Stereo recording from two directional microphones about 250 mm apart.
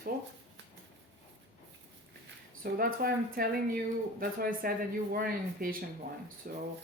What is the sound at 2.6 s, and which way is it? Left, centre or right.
Speech, right.